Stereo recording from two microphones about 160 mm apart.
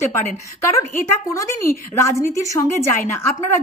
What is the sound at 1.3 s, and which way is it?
A woman's voice, 15° left (ahead or behind).